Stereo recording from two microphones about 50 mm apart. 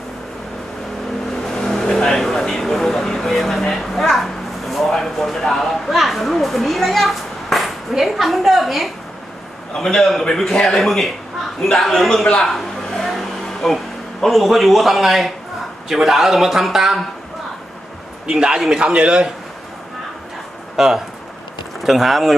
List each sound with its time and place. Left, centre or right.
1.5 s vehicle: centre
9.7 s a man's voice: centre
12.2 s a man's voice: left
12.5 s a sound: centre
14.2 s a man's voice: centre
18.3 s a man's voice: centre
20.7 s a man's voice: centre